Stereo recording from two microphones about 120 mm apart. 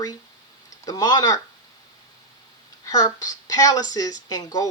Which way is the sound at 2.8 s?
30° left (ahead or behind).